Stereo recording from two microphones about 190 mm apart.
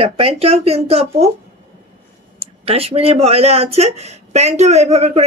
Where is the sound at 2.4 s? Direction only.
30° right (ahead or behind).